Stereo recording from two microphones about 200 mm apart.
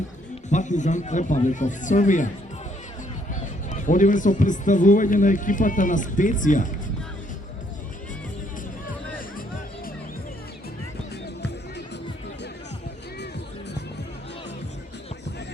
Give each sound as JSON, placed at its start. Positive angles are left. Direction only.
{"t": 0.5, "sound": "a man's voice", "side_deg": 35}
{"t": 3.7, "sound": "a man's voice", "side_deg": 40}